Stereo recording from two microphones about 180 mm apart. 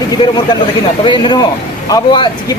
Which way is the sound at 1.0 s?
25° left (ahead or behind).